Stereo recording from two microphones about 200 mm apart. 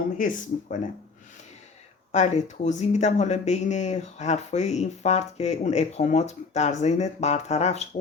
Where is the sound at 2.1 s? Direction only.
35° left (ahead or behind).